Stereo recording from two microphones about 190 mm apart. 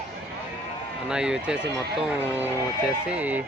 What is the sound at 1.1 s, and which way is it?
Speech, 5° right (ahead or behind).